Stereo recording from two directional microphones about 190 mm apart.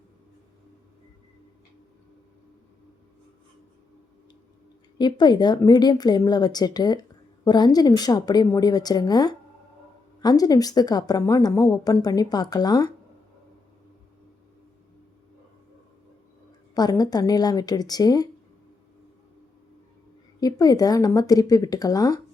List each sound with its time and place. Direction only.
4.9 s a woman's voice: 25° left (ahead or behind)
16.7 s a woman's voice: 20° left (ahead or behind)
20.4 s a woman's voice: 20° left (ahead or behind)